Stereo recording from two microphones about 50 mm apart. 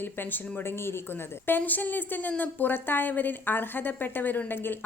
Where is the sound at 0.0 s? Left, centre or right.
Left.